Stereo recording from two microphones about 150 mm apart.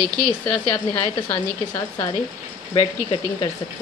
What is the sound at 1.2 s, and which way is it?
Speech, 15° left (ahead or behind).